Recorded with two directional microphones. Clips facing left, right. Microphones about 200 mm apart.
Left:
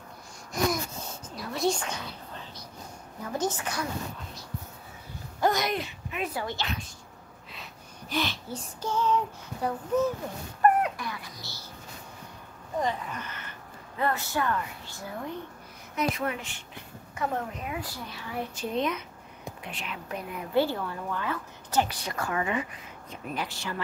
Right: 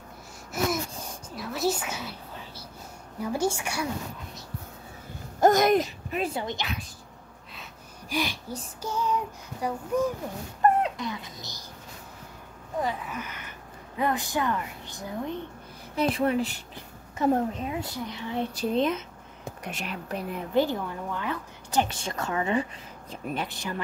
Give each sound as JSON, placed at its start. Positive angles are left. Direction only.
{"t": 0.5, "sound": "gasp", "side_deg": -10}
{"t": 1.4, "sound": "a sound", "side_deg": -5}
{"t": 3.3, "sound": "a woman's voice", "side_deg": -10}
{"t": 5.4, "sound": "speech", "side_deg": -45}
{"t": 6.3, "sound": "a woman's voice", "side_deg": -20}
{"t": 8.1, "sound": "a woman's voice", "side_deg": -10}
{"t": 10.6, "sound": "speech", "side_deg": -20}
{"t": 12.8, "sound": "a woman's voice", "side_deg": -5}
{"t": 15.9, "sound": "a woman's voice", "side_deg": -30}
{"t": 18.5, "sound": "a sound", "side_deg": -35}
{"t": 19.6, "sound": "a woman's voice", "side_deg": -45}
{"t": 20.5, "sound": "a woman's voice", "side_deg": -15}
{"t": 21.8, "sound": "a woman's voice", "side_deg": -25}